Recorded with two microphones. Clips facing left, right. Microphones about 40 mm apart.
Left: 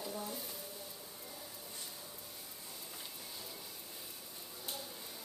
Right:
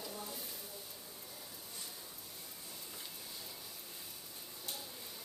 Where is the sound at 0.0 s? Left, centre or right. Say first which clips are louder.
Left 3 dB; centre.